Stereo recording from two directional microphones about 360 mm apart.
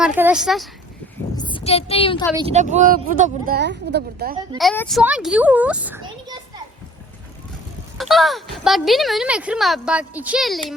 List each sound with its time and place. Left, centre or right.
0.0 s speech: centre
1.4 s speech: centre
2.3 s speech: centre
4.5 s speech: centre
7.9 s speech: centre